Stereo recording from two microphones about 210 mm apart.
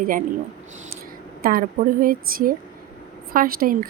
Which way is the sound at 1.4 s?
40° right (ahead or behind).